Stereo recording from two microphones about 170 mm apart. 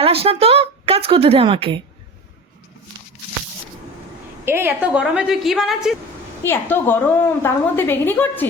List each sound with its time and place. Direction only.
0.0 s speech: 35° right (ahead or behind)
4.4 s a woman's voice: 15° right (ahead or behind)
6.4 s a woman's voice: 15° left (ahead or behind)